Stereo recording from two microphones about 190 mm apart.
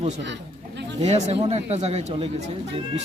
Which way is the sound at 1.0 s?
35° right (ahead or behind).